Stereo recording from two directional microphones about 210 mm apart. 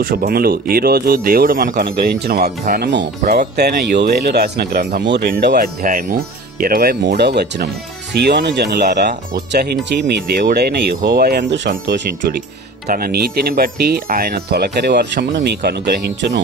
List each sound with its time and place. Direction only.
0.0 s speech: 45° right (ahead or behind)
12.8 s speech: 45° right (ahead or behind)